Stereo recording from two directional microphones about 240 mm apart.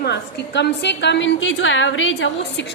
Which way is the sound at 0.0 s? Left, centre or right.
Left.